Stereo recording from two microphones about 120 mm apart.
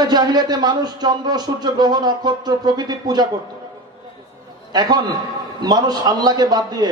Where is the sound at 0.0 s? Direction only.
35° right (ahead or behind).